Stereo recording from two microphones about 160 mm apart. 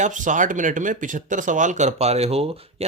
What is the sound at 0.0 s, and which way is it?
Speech, 50° right (ahead or behind).